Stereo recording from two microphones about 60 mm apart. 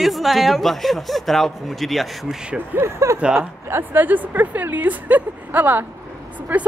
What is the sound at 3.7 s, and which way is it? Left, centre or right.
Speech, right.